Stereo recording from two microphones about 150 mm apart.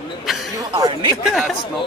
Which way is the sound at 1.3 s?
Centre (ahead or behind).